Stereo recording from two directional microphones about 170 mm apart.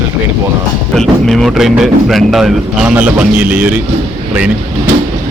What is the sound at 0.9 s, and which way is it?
Speech, centre (ahead or behind).